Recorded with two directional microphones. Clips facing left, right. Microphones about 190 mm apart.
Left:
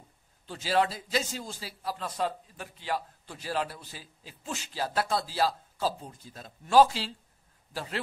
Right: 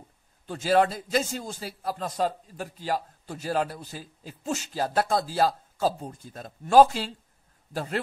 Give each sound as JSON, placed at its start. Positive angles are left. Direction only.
{"t": 0.5, "sound": "a man's voice", "side_deg": -50}